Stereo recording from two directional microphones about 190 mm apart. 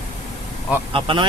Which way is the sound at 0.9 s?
25° right (ahead or behind).